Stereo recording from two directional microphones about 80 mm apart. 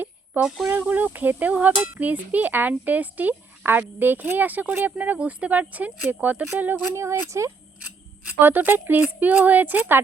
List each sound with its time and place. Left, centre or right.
0.4 s speech: right
6.9 s speech: right
8.4 s speech: right